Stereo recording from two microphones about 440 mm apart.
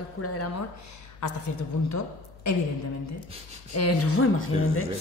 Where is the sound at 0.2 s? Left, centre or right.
Left.